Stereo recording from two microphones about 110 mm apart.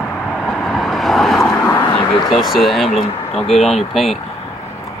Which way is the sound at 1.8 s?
50° left (ahead or behind).